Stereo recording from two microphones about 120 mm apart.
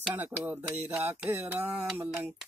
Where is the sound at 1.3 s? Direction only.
20° right (ahead or behind).